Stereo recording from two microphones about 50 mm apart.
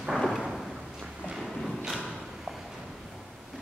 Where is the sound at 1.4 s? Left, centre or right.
Centre.